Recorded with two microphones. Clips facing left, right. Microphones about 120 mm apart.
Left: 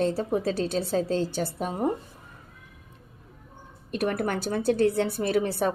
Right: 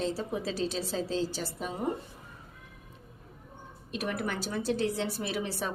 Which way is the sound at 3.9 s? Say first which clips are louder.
Left 6 dB; 50° left (ahead or behind).